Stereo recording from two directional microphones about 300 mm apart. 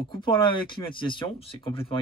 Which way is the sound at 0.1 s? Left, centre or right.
Centre.